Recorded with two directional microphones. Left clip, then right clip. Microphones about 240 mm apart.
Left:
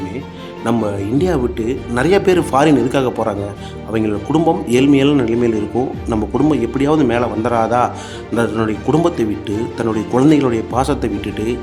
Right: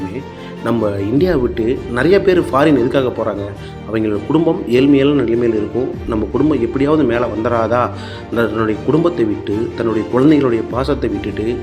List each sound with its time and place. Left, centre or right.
0.6 s speech: centre